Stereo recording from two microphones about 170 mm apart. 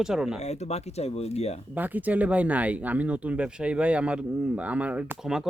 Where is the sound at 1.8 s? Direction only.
10° right (ahead or behind).